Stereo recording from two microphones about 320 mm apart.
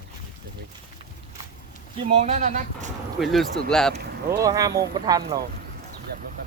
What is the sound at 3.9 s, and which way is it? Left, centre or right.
Speech, right.